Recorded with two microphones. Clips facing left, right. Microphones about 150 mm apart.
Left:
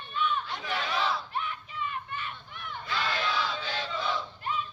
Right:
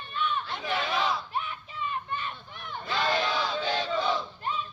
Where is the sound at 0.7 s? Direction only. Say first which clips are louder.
Right 2 dB; 10° right (ahead or behind).